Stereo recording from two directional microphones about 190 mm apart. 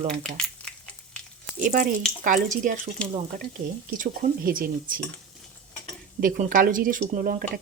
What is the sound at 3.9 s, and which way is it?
Speech, 45° right (ahead or behind).